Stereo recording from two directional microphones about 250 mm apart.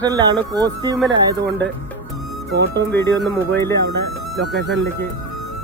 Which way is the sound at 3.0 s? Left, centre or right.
Centre.